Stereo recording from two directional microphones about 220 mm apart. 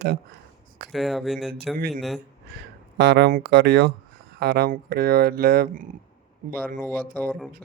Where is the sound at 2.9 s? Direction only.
50° right (ahead or behind).